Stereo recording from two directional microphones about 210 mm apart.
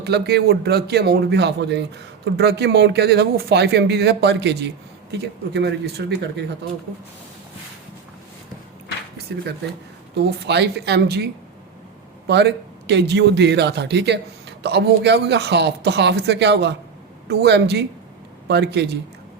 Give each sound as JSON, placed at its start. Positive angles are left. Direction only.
{"t": 0.0, "sound": "speech", "side_deg": -50}
{"t": 9.3, "sound": "speech", "side_deg": -55}
{"t": 12.3, "sound": "speech", "side_deg": -55}